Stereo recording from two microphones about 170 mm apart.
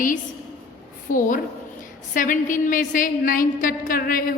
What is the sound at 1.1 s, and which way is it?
A woman's voice, 50° left (ahead or behind).